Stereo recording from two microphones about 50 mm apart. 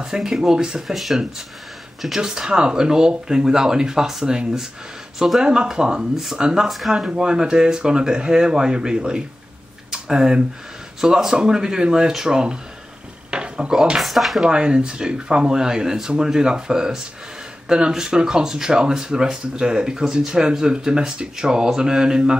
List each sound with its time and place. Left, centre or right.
0.0 s speech: centre
9.8 s a sound: centre
11.0 s speech: centre
13.3 s a sound: centre
13.9 s speech: centre
14.4 s speech: centre